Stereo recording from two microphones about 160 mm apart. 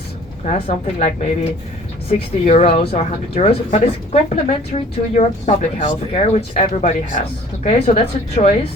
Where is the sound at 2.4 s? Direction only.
40° left (ahead or behind).